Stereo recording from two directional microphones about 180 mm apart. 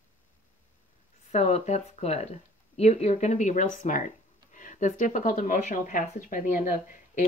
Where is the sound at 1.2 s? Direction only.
35° left (ahead or behind).